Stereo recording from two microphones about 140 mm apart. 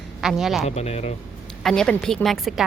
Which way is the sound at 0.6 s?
50° left (ahead or behind).